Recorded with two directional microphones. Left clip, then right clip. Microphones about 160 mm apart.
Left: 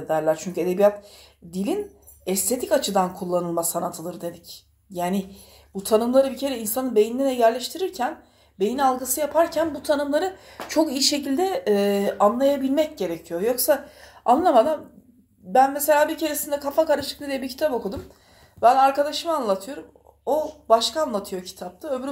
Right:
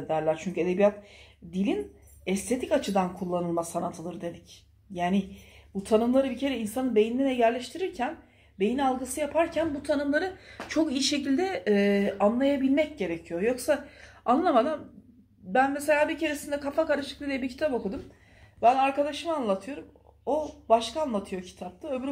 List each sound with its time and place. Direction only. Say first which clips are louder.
0.1 s speech: left 5 dB; 10° left (ahead or behind)
2.4 s speech: left 5 dB; 15° left (ahead or behind)
5.8 s a woman's voice: left 5 dB; 10° left (ahead or behind)